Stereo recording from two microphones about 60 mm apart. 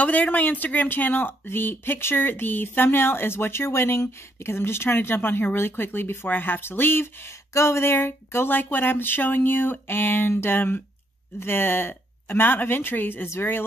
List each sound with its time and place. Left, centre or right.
0.0 s speech: left
7.5 s speech: left